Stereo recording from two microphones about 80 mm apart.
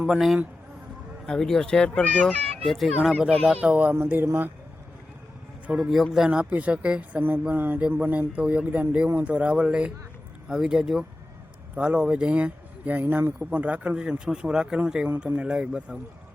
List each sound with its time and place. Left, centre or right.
0.0 s speech: centre
1.3 s speech: centre
2.6 s speech: centre
3.4 s a man's voice: centre
5.8 s a man's voice: centre